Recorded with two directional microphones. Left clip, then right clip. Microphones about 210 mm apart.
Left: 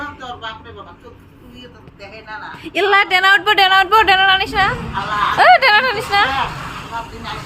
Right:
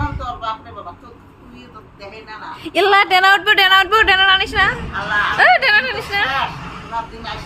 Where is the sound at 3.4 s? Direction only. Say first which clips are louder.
Even; 5° left (ahead or behind).